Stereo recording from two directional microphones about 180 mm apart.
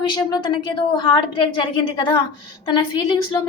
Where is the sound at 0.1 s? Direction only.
25° left (ahead or behind).